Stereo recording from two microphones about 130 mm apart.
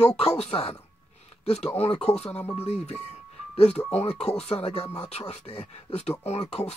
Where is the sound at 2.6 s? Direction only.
55° left (ahead or behind).